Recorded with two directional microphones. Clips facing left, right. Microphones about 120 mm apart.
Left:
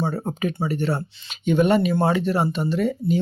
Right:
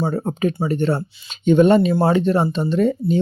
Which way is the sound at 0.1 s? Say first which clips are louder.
Right 5 dB; 25° right (ahead or behind).